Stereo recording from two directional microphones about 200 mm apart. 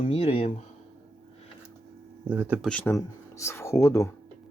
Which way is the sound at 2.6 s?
10° left (ahead or behind).